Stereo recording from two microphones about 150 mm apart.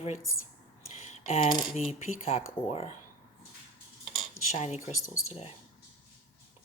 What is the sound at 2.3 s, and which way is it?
Speech, 45° left (ahead or behind).